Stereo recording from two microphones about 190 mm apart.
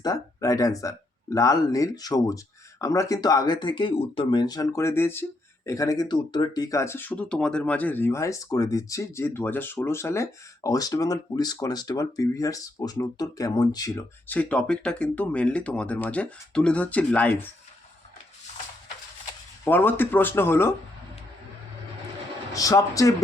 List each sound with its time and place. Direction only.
0.0 s speech: 20° left (ahead or behind)
19.6 s speech: 10° left (ahead or behind)
22.5 s speech: 20° left (ahead or behind)